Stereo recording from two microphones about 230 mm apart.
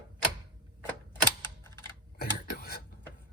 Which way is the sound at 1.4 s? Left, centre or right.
Centre.